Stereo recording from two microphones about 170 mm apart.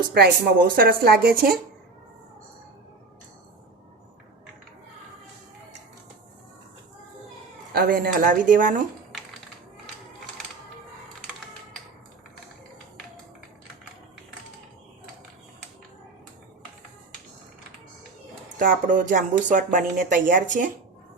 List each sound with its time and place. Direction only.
0.1 s speech: 70° right (ahead or behind)
7.7 s speech: 55° right (ahead or behind)
18.6 s speech: 50° right (ahead or behind)